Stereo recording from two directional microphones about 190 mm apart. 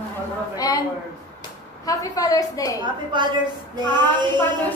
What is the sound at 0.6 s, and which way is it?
Speech, 20° left (ahead or behind).